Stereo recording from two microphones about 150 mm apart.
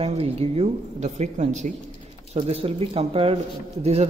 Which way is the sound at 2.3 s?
40° right (ahead or behind).